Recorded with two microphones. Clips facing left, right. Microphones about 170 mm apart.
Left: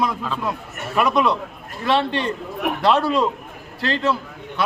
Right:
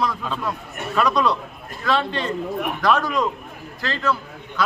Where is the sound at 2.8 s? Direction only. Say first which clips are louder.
Left 3 dB; 30° left (ahead or behind).